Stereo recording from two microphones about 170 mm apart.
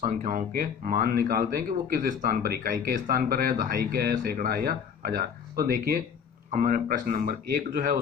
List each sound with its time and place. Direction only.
0.0 s speech: 50° right (ahead or behind)